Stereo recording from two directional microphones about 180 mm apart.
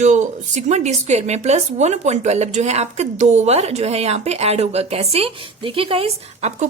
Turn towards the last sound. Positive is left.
turn(degrees=-35)  # may be behind; listen again after turning